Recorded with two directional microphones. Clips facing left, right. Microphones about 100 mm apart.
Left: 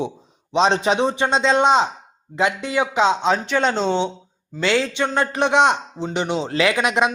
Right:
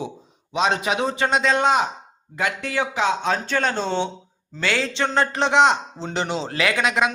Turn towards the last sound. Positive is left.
turn(degrees=20)  # may be behind; listen again after turning